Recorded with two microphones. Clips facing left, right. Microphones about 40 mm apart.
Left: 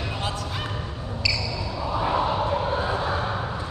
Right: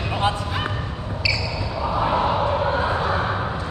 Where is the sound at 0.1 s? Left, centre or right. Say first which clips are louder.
Right 7 dB; right.